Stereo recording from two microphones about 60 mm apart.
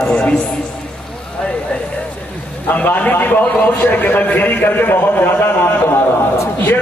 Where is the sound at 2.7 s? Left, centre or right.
Left.